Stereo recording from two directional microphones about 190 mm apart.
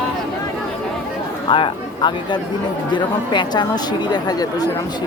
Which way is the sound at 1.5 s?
25° left (ahead or behind).